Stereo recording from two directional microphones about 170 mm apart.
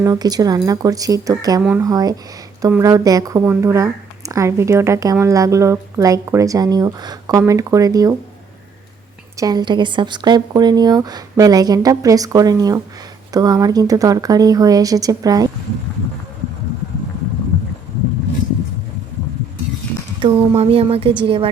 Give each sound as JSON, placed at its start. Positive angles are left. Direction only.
{"t": 0.0, "sound": "a woman's voice", "side_deg": -25}
{"t": 9.4, "sound": "a woman's voice", "side_deg": -25}
{"t": 20.2, "sound": "speech", "side_deg": -30}